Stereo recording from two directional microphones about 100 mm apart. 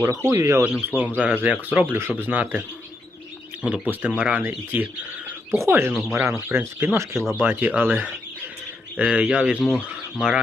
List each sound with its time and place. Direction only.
0.2 s speech: 25° right (ahead or behind)
5.9 s speech: centre (ahead or behind)
6.1 s speech: 25° right (ahead or behind); by 9.6 s 10° right (ahead or behind)
9.6 s speech: 10° left (ahead or behind)
9.8 s speech: 5° right (ahead or behind)